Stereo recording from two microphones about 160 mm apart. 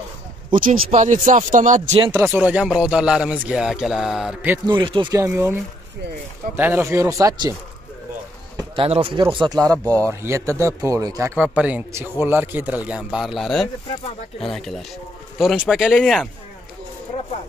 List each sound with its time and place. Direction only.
0.5 s speech: 60° right (ahead or behind)
2.1 s speech: 10° right (ahead or behind)
4.6 s speech: 30° right (ahead or behind)
5.1 s a man's voice: 15° right (ahead or behind)
8.7 s speech: 35° right (ahead or behind)
11.3 s a man's voice: 10° right (ahead or behind)
13.8 s speech: 35° left (ahead or behind)
14.5 s speech: centre (ahead or behind)